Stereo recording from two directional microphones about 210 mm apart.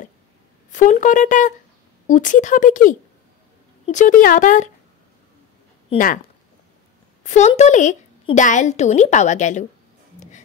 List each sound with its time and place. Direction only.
0.7 s a woman's voice: 35° left (ahead or behind)
5.9 s speech: 25° left (ahead or behind)
7.2 s a woman's voice: 35° left (ahead or behind)